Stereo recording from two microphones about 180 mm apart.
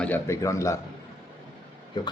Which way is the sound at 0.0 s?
10° left (ahead or behind).